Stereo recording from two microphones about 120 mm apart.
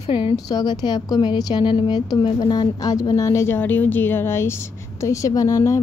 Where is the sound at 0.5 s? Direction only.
35° left (ahead or behind).